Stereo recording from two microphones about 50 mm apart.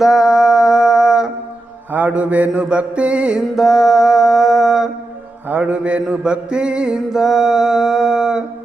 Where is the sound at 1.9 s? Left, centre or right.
Right.